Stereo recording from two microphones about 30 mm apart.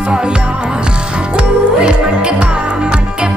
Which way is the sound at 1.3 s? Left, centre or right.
Right.